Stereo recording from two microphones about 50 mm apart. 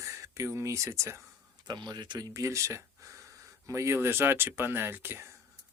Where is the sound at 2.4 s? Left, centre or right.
Right.